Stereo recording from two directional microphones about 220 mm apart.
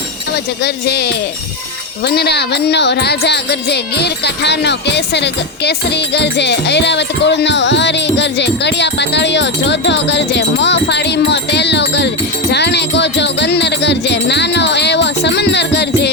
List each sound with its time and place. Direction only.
0.6 s music: 50° left (ahead or behind)